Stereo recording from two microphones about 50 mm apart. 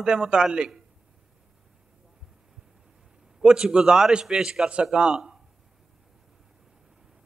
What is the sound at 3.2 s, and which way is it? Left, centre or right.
A man's voice, centre.